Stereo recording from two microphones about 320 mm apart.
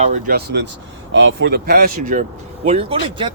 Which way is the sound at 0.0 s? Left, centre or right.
Right.